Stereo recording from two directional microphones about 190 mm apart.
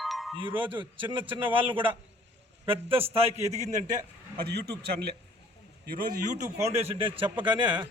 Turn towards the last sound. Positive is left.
turn(degrees=-25)  # may be behind; listen again after turning